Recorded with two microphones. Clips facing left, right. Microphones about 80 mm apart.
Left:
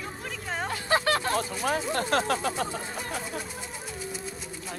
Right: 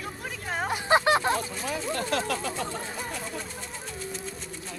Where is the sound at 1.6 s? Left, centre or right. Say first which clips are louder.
Left 4 dB; left.